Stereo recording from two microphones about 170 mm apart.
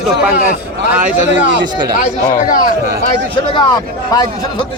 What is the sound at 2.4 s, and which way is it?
Speech, 55° left (ahead or behind).